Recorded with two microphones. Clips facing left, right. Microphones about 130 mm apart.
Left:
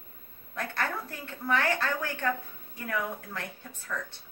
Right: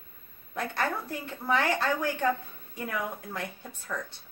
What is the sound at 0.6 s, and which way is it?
A woman's voice, 15° right (ahead or behind).